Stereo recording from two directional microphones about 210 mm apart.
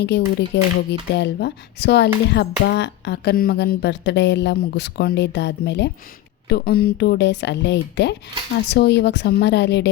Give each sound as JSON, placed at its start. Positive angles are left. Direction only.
{"t": 0.0, "sound": "speech", "side_deg": 55}